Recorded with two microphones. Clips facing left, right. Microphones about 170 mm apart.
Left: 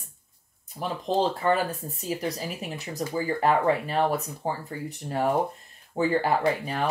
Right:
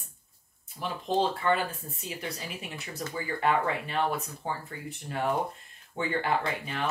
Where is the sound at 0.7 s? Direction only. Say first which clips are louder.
Left 3 dB; 40° left (ahead or behind).